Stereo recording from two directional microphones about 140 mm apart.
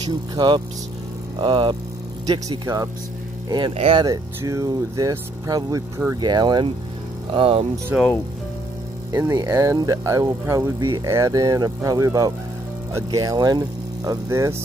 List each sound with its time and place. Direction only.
1.4 s speech: 35° right (ahead or behind)
3.7 s speech: 45° right (ahead or behind)
4.4 s speech: 20° right (ahead or behind); by 7.6 s 40° right (ahead or behind)
7.9 s speech: 15° right (ahead or behind)
9.1 s speech: 20° right (ahead or behind)